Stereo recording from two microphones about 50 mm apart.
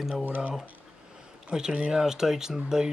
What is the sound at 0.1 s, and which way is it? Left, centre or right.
Speech, right.